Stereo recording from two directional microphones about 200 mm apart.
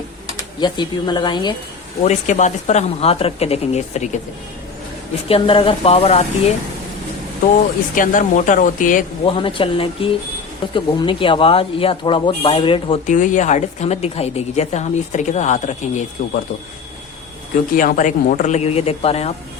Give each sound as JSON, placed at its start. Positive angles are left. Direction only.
{"t": 0.3, "sound": "speech", "side_deg": 20}
{"t": 2.0, "sound": "speech", "side_deg": 35}
{"t": 5.3, "sound": "speech", "side_deg": 25}
{"t": 7.9, "sound": "speech", "side_deg": 40}
{"t": 9.2, "sound": "speech", "side_deg": 25}
{"t": 13.1, "sound": "speech", "side_deg": 40}
{"t": 17.7, "sound": "speech", "side_deg": 40}